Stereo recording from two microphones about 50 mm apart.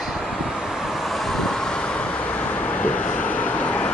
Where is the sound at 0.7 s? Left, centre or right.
Centre.